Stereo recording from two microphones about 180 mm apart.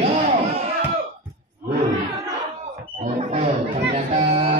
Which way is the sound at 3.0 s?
35° right (ahead or behind).